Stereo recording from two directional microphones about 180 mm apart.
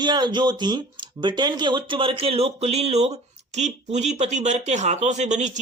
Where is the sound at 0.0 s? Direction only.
25° right (ahead or behind).